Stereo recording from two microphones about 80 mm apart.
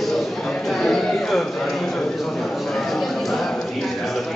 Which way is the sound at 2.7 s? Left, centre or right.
Centre.